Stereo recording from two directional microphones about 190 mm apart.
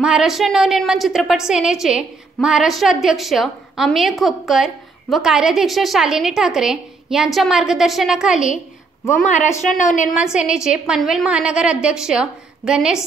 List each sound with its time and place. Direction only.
0.0 s a woman's voice: 5° right (ahead or behind)
9.6 s a woman's voice: 40° left (ahead or behind)
10.1 s a woman's voice: 5° right (ahead or behind)